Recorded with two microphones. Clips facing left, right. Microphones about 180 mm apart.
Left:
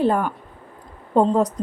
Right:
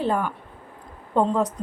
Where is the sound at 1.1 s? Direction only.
40° left (ahead or behind).